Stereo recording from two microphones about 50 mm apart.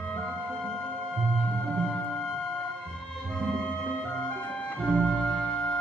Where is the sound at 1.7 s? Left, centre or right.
Left.